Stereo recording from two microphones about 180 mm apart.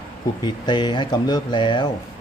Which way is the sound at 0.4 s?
25° left (ahead or behind).